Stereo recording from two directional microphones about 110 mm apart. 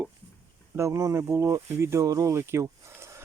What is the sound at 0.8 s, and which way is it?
Speech, 25° right (ahead or behind).